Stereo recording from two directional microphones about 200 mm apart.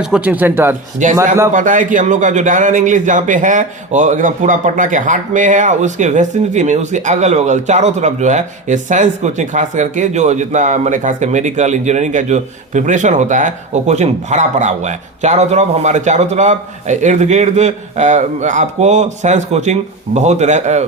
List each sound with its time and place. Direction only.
0.0 s speech: 5° right (ahead or behind)
1.0 s a man's voice: 40° right (ahead or behind)